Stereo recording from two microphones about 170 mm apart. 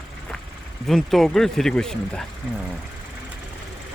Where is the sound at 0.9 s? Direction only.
Centre (ahead or behind).